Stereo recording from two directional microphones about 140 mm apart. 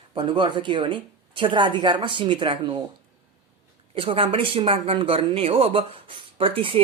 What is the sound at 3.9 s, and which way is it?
Speech, 40° right (ahead or behind).